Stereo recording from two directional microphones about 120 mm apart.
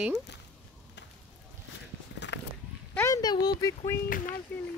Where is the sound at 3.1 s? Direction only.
35° left (ahead or behind).